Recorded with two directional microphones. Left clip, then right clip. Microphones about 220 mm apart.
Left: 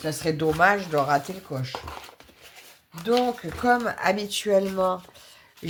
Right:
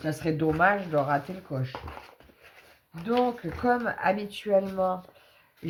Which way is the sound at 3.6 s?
30° left (ahead or behind).